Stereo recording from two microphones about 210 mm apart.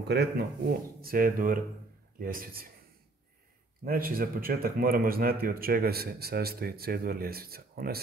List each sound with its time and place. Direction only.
0.1 s speech: 50° right (ahead or behind)
3.8 s speech: 45° right (ahead or behind)